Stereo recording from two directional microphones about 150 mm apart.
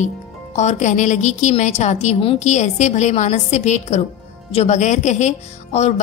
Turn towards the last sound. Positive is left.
turn(degrees=50)  # may be behind; listen again after turning